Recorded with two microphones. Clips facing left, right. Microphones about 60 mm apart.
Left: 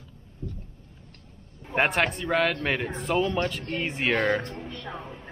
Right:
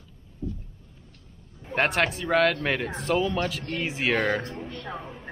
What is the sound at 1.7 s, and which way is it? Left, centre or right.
Speech, centre.